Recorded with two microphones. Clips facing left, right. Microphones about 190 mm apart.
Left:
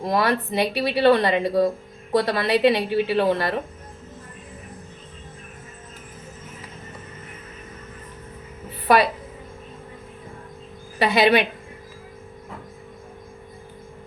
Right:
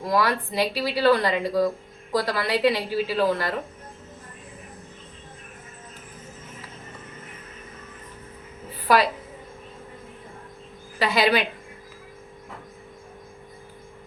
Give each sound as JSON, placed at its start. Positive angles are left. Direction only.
{"t": 0.0, "sound": "speech", "side_deg": 25}
{"t": 11.0, "sound": "speech", "side_deg": 25}